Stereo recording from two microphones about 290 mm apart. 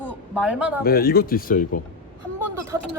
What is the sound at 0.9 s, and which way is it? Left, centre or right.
Speech, left.